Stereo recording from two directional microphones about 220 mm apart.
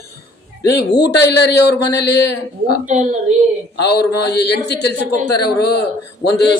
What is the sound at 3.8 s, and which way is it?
Speech, 50° left (ahead or behind).